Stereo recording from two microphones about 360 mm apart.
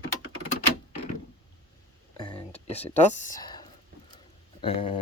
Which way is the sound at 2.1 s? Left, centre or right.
Centre.